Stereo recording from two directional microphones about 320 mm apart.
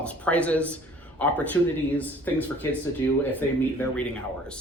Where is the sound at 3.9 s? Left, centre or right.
Centre.